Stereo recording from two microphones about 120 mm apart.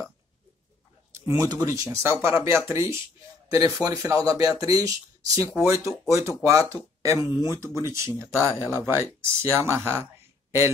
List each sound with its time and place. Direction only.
1.1 s speech: 25° right (ahead or behind)